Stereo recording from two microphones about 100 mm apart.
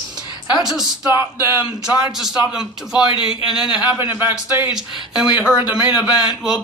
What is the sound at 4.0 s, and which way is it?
Speech, 20° right (ahead or behind).